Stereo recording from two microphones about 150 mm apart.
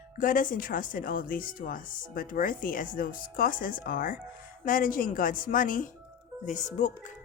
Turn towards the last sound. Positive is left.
turn(degrees=55)  # may be behind; listen again after turning